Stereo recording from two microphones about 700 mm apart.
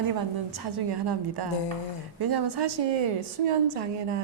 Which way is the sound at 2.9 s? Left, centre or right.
Right.